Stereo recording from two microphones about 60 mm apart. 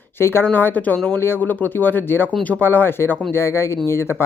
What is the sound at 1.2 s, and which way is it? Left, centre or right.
Speech, left.